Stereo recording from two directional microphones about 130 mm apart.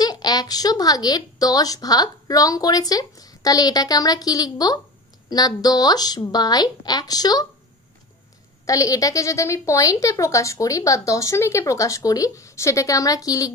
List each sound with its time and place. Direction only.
0.0 s a woman's voice: 30° left (ahead or behind)
8.6 s speech: 25° left (ahead or behind)